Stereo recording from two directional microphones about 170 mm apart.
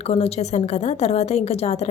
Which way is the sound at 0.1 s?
35° left (ahead or behind).